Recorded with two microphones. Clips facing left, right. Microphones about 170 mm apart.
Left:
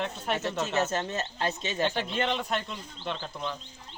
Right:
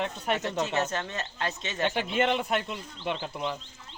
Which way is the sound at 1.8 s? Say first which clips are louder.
Right 2 dB; 5° right (ahead or behind).